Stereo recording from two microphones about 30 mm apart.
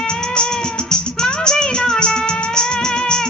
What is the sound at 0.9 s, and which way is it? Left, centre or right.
Music, left.